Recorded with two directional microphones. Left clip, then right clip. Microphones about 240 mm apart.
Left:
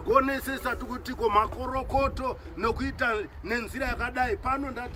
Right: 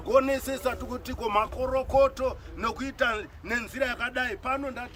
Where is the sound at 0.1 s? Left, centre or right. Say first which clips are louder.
Even; right.